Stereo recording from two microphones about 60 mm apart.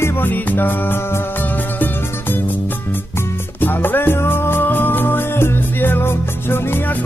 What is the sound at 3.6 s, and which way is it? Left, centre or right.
Music, left.